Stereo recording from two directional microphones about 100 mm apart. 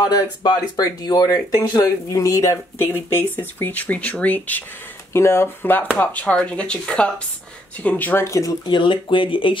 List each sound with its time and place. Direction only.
0.0 s speech: 40° left (ahead or behind); by 4.6 s 15° left (ahead or behind)
5.1 s speech: 25° left (ahead or behind)
8.6 s speech: 55° left (ahead or behind)